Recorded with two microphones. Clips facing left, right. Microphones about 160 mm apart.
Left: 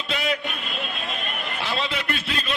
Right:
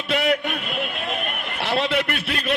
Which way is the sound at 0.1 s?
60° right (ahead or behind).